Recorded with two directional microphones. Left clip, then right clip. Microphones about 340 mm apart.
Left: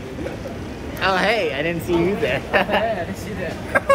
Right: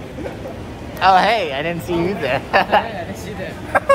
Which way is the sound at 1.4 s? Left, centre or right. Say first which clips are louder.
Even; centre.